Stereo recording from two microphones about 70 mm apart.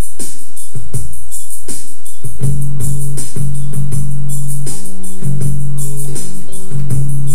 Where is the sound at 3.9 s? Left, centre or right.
Left.